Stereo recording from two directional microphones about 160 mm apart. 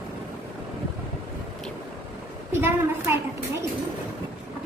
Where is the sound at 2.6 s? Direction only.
15° right (ahead or behind).